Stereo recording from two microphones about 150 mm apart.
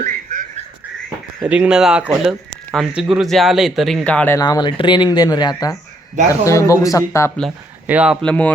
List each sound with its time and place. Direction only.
0.0 s a sound: 60° right (ahead or behind)
1.5 s speech: 10° right (ahead or behind); by 4.4 s 10° left (ahead or behind)
4.4 s speech: 25° left (ahead or behind)
7.9 s speech: 5° right (ahead or behind)
8.2 s speech: 10° left (ahead or behind)